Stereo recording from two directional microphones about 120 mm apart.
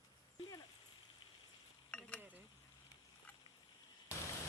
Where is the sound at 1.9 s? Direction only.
10° left (ahead or behind).